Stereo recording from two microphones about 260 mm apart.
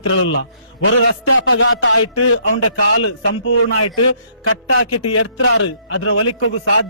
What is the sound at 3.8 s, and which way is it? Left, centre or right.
Speech, left.